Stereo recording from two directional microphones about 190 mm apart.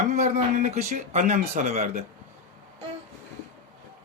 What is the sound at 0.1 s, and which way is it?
Speech, 40° right (ahead or behind).